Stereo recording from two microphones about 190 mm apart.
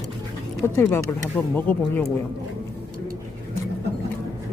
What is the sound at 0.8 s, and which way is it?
Speech, 10° left (ahead or behind).